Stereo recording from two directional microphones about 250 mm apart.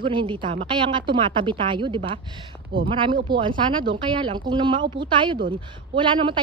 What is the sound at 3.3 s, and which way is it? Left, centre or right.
A woman's voice, centre.